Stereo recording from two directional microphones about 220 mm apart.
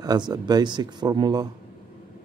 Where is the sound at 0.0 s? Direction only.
20° right (ahead or behind).